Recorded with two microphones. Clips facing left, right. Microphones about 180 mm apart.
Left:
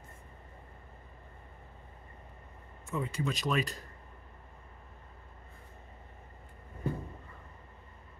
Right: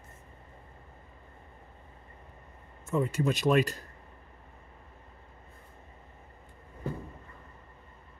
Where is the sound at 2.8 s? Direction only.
45° right (ahead or behind).